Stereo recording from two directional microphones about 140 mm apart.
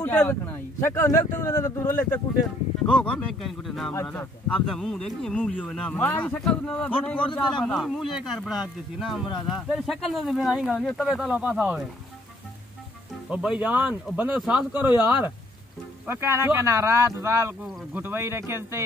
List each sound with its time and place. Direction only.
0.0 s speech: 10° left (ahead or behind)
2.9 s speech: 10° left (ahead or behind)
3.9 s a man's voice: 15° left (ahead or behind); by 11.8 s 5° right (ahead or behind)
13.3 s speech: 10° right (ahead or behind)
15.0 s speech: 30° left (ahead or behind)
16.1 s speech: 20° right (ahead or behind)